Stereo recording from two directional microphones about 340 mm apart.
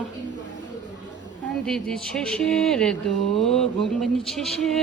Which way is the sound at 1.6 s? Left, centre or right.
Centre.